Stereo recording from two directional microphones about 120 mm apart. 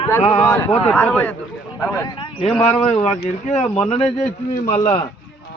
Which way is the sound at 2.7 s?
60° left (ahead or behind).